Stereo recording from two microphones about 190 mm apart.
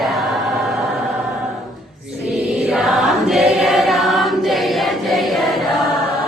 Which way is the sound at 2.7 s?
Centre (ahead or behind).